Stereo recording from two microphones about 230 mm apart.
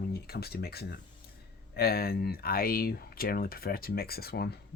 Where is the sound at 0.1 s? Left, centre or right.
Left.